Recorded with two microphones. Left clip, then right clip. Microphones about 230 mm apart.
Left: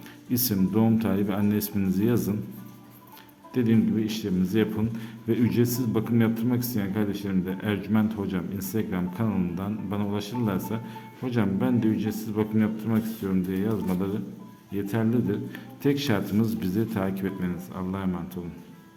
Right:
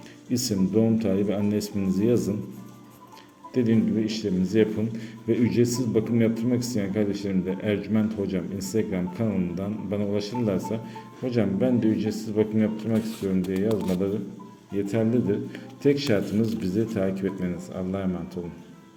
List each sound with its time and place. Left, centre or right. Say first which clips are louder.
0.3 s a man's voice: right 1 dB; centre
3.5 s a man's voice: right 1 dB; centre